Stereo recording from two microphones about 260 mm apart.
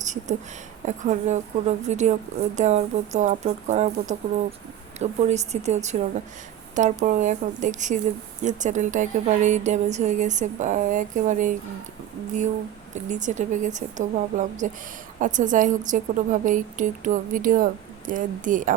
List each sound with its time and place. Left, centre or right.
0.0 s a sound: right
0.9 s a woman's voice: right
12.9 s a woman's voice: right